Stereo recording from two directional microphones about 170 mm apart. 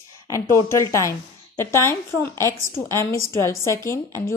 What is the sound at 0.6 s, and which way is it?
A woman's voice, 20° left (ahead or behind).